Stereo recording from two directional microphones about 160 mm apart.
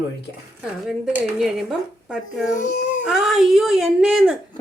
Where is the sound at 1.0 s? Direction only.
5° right (ahead or behind).